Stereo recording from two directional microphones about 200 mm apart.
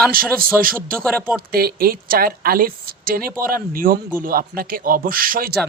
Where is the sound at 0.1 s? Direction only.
45° right (ahead or behind).